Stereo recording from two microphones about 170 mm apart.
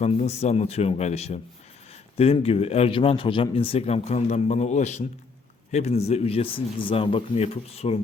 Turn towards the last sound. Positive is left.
turn(degrees=35)  # may be behind; listen again after turning